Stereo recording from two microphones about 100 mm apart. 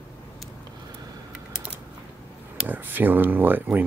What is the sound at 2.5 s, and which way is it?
Speech, 20° right (ahead or behind).